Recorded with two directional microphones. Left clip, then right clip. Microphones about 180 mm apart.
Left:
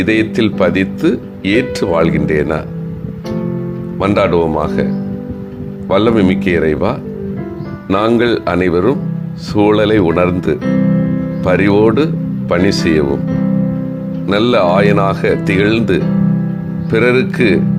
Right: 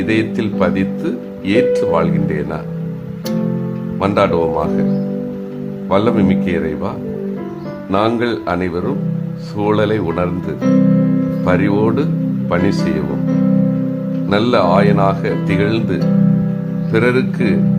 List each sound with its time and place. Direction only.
0.0 s speech: 25° left (ahead or behind)
4.0 s speech: 25° left (ahead or behind)
5.9 s speech: 25° left (ahead or behind)
10.6 s speech: 10° right (ahead or behind)
11.4 s speech: 30° left (ahead or behind)
14.3 s speech: 30° left (ahead or behind)